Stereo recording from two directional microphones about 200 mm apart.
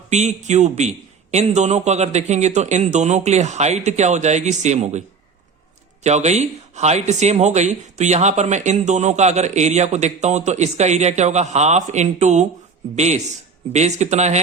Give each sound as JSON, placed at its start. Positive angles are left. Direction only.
{"t": 0.1, "sound": "speech", "side_deg": -35}